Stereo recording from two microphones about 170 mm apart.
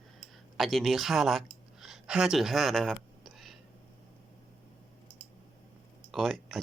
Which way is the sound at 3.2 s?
Centre (ahead or behind).